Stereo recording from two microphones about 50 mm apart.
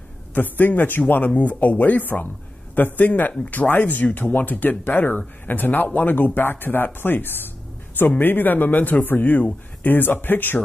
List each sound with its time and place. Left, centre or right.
0.3 s speech: left